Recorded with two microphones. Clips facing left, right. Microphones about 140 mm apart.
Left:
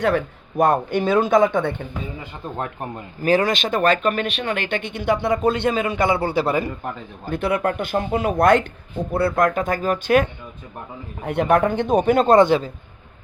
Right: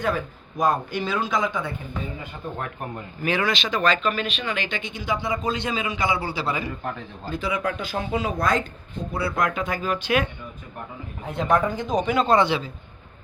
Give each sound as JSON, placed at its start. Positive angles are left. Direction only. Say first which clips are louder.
{"t": 0.0, "sound": "speech", "louder": "left 6 dB", "side_deg": 70}
{"t": 2.6, "sound": "speech", "louder": "left 6 dB", "side_deg": 25}
{"t": 3.2, "sound": "speech", "louder": "left 6 dB", "side_deg": 40}
{"t": 9.1, "sound": "speech", "louder": "left 6 dB", "side_deg": 50}
{"t": 11.3, "sound": "speech", "louder": "left 4 dB", "side_deg": 65}